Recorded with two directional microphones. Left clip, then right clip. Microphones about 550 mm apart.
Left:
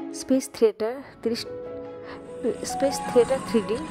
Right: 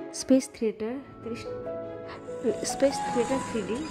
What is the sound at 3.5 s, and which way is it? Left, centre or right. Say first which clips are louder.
Speech: left 8 dB; centre.